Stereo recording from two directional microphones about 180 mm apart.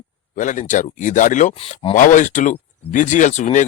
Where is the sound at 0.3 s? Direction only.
45° left (ahead or behind).